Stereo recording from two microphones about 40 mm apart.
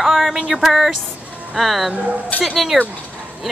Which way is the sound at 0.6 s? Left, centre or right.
Centre.